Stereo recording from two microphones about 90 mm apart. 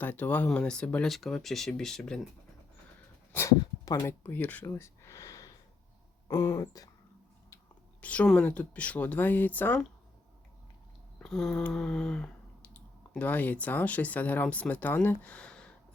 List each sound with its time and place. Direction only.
0.0 s speech: 20° left (ahead or behind)
1.0 s speech: centre (ahead or behind)
3.3 s speech: 30° left (ahead or behind)
4.2 s speech: 20° left (ahead or behind)
4.6 s a sound: 30° left (ahead or behind)
6.2 s speech: 30° left (ahead or behind)
8.0 s speech: 15° left (ahead or behind)
11.2 s a sound: 5° left (ahead or behind)
11.7 s speech: 5° left (ahead or behind)